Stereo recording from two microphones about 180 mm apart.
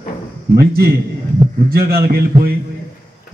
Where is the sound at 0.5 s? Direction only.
60° right (ahead or behind).